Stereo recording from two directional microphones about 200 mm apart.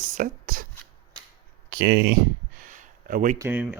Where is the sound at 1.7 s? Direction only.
60° right (ahead or behind).